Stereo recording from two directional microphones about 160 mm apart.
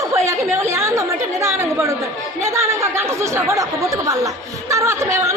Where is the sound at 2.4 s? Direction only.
15° right (ahead or behind).